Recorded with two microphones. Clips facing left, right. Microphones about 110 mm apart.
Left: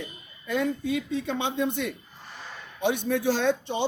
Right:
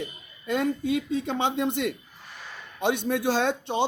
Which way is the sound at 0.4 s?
55° right (ahead or behind).